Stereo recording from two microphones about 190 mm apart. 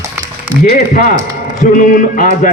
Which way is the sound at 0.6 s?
50° left (ahead or behind).